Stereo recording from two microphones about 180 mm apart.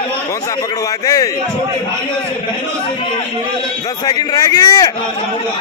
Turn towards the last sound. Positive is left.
turn(degrees=20)  # may be behind; listen again after turning